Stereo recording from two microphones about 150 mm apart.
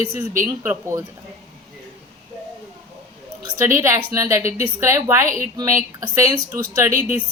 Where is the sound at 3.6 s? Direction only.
15° right (ahead or behind).